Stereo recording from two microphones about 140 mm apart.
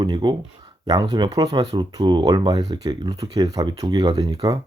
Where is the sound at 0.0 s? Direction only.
30° right (ahead or behind).